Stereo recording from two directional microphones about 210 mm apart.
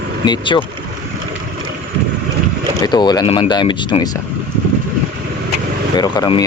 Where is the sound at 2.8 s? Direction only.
20° left (ahead or behind).